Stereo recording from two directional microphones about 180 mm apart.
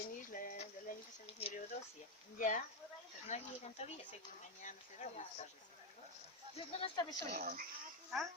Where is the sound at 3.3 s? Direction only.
35° left (ahead or behind).